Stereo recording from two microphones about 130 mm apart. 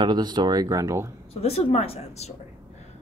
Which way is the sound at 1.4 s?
50° left (ahead or behind).